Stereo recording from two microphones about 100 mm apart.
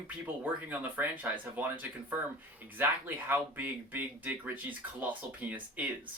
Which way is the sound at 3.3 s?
20° right (ahead or behind).